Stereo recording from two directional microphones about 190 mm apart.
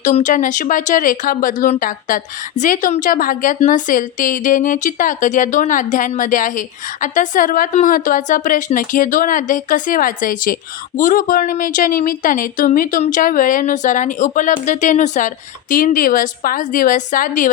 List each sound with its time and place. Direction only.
0.0 s speech: 40° left (ahead or behind)